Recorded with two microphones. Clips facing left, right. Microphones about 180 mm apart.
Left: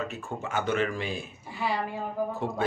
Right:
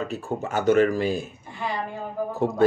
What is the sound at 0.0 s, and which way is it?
Speech, 35° right (ahead or behind).